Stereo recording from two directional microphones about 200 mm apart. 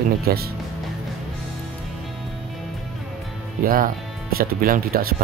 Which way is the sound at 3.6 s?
45° right (ahead or behind).